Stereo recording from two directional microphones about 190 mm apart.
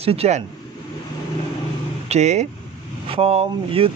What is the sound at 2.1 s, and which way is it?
A man's voice, 35° right (ahead or behind).